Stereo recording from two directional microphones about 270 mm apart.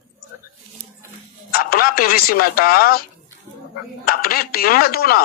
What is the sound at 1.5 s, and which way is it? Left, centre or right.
Speech, left.